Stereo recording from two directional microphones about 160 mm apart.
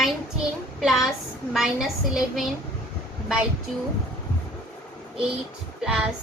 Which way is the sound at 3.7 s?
Centre (ahead or behind).